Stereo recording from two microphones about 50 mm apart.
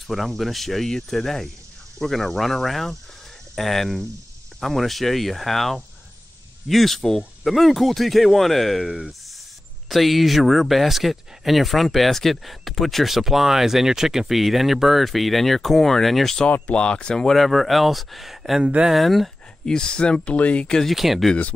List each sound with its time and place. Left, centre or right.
0.0 s speech: centre
16.7 s speech: left
17.4 s speech: centre
18.6 s speech: right
18.9 s speech: centre
19.7 s speech: centre
20.6 s speech: centre
20.9 s speech: centre